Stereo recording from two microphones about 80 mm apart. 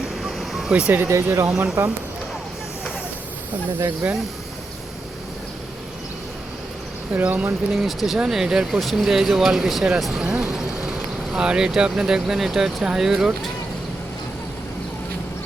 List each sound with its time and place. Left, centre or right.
0.2 s vehicle: centre
0.7 s speech: centre
1.1 s speech: right
4.0 s speech: right
7.1 s speech: centre
7.7 s speech: centre